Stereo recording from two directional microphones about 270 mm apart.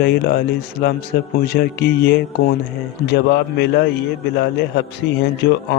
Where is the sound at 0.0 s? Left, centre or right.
Left.